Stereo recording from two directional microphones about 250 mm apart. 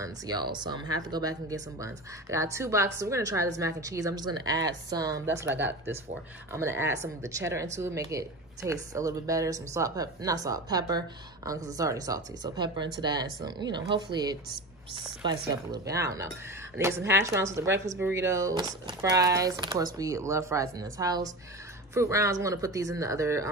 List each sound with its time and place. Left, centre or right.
0.0 s a woman's voice: centre
15.5 s a woman's voice: centre